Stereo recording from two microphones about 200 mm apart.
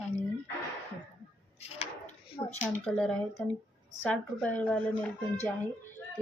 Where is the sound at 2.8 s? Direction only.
5° left (ahead or behind).